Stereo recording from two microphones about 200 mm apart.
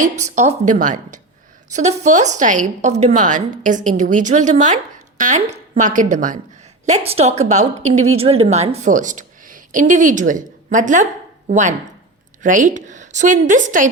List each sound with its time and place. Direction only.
0.3 s a woman's voice: 35° right (ahead or behind)